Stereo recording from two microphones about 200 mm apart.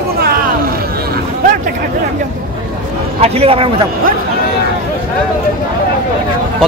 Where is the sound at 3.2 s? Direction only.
30° right (ahead or behind).